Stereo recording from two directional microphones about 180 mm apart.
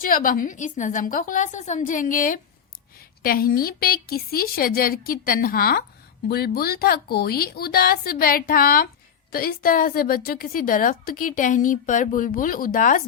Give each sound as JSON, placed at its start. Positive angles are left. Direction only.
{"t": 0.0, "sound": "a woman's voice", "side_deg": 50}